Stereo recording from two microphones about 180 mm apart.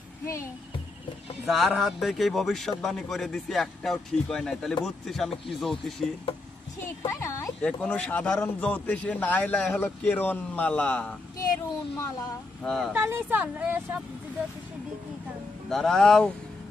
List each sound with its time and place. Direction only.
0.3 s speech: 15° left (ahead or behind)
1.5 s a man's voice: centre (ahead or behind)
6.7 s speech: 15° left (ahead or behind)
12.6 s a man's voice: centre (ahead or behind)
12.9 s speech: 15° right (ahead or behind)
15.7 s a man's voice: centre (ahead or behind)